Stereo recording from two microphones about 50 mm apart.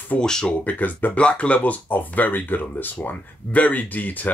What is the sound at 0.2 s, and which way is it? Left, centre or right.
Speech, centre.